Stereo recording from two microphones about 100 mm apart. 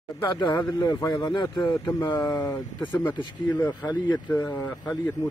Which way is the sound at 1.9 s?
40° left (ahead or behind).